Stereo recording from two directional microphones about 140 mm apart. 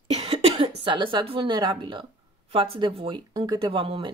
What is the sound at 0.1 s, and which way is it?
Speech, 50° right (ahead or behind).